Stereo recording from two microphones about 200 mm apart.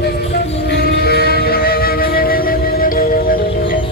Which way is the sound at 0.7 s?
50° left (ahead or behind).